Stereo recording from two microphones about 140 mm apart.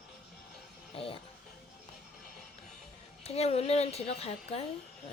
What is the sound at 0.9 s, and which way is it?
Speech, 40° left (ahead or behind).